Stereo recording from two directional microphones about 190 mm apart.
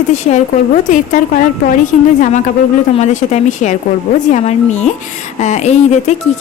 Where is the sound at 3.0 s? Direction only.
40° left (ahead or behind).